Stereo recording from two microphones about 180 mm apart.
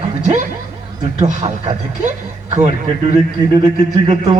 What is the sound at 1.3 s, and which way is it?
A man's voice, 40° right (ahead or behind).